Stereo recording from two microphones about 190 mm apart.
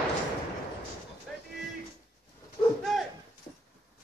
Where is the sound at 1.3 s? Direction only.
Centre (ahead or behind).